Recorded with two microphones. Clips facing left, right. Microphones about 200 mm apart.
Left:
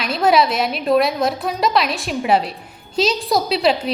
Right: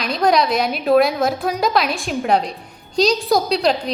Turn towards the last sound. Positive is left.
turn(degrees=5)  # may be behind; listen again after turning